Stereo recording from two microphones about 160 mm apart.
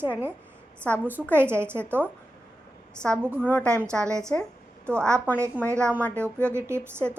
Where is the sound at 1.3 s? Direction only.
15° right (ahead or behind).